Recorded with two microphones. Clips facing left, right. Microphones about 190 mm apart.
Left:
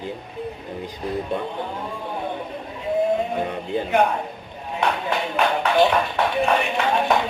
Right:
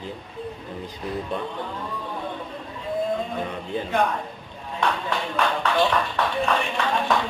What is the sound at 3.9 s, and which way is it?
A man's voice, 20° left (ahead or behind).